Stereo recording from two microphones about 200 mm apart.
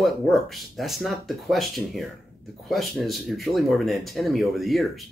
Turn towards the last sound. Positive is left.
turn(degrees=0)  # may be behind; listen again after turning